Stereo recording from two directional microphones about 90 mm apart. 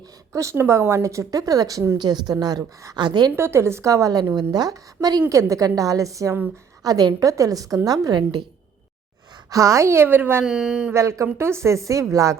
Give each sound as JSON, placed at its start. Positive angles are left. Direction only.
{"t": 0.3, "sound": "a woman's voice", "side_deg": -30}
{"t": 3.3, "sound": "a woman's voice", "side_deg": -30}
{"t": 9.5, "sound": "a woman's voice", "side_deg": -35}
{"t": 10.4, "sound": "speech", "side_deg": -10}
{"t": 10.9, "sound": "speech", "side_deg": -35}